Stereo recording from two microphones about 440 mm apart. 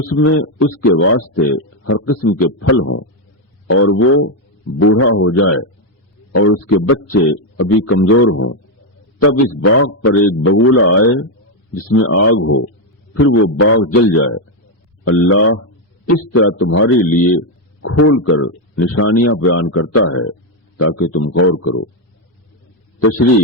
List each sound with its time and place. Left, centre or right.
0.1 s a man's voice: left
6.8 s a man's voice: left